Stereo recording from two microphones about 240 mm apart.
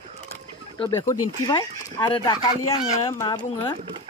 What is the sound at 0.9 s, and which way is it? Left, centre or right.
Speech, centre.